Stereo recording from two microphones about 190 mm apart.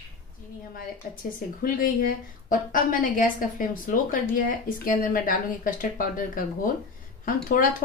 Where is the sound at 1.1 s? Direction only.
50° left (ahead or behind).